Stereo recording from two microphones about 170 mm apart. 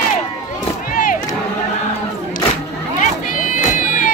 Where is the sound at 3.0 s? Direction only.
50° left (ahead or behind).